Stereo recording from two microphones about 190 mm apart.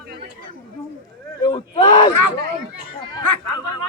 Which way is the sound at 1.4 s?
25° left (ahead or behind).